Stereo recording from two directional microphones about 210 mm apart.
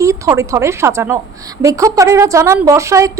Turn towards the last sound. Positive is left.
turn(degrees=-15)  # may be behind; listen again after turning